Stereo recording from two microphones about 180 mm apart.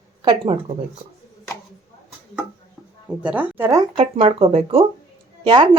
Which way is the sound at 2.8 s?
Centre (ahead or behind).